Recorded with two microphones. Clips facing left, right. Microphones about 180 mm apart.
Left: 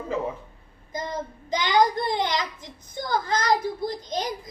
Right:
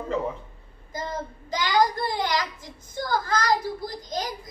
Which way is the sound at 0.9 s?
20° left (ahead or behind).